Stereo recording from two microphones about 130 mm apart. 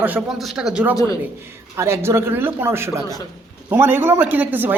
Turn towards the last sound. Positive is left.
turn(degrees=-15)  # may be behind; listen again after turning